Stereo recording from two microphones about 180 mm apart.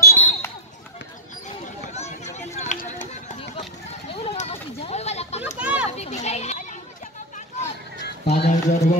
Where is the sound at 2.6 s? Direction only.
40° left (ahead or behind).